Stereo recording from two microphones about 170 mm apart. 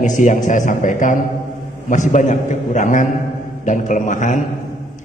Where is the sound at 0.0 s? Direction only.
50° left (ahead or behind).